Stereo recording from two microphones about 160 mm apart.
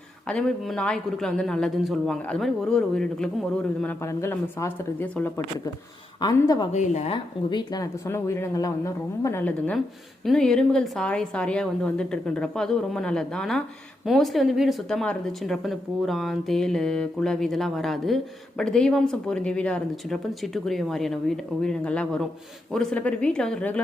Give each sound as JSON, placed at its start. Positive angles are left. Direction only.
{"t": 0.3, "sound": "speech", "side_deg": 5}
{"t": 4.0, "sound": "speech", "side_deg": 15}
{"t": 6.1, "sound": "speech", "side_deg": 25}
{"t": 6.7, "sound": "a woman's voice", "side_deg": 45}
{"t": 7.5, "sound": "speech", "side_deg": 25}